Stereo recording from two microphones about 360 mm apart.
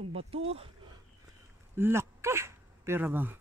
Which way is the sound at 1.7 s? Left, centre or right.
Centre.